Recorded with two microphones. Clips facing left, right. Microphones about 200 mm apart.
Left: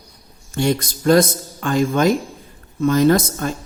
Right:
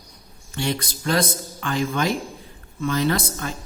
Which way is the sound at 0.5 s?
45° left (ahead or behind).